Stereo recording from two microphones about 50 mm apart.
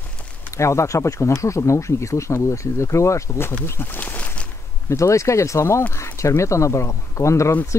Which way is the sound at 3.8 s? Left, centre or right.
Left.